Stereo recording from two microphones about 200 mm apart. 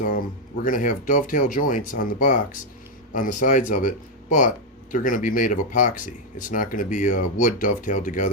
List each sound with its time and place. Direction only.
0.6 s speech: 40° left (ahead or behind)